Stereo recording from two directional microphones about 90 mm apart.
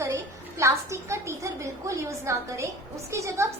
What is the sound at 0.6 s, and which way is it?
A woman's voice, 30° right (ahead or behind).